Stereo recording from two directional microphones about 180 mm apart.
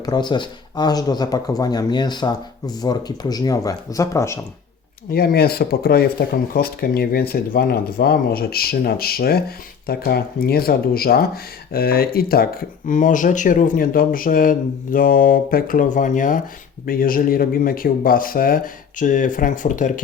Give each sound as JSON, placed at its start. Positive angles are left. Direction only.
{"t": 0.0, "sound": "speech", "side_deg": 25}
{"t": 5.1, "sound": "speech", "side_deg": 60}